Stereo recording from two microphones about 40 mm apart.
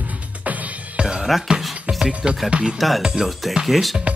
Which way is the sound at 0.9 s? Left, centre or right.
Right.